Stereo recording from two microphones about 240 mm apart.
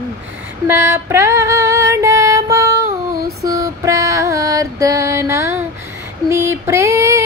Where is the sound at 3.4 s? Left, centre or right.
Centre.